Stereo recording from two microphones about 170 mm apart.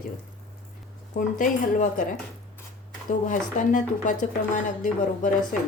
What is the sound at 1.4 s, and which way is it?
Speech, 50° left (ahead or behind).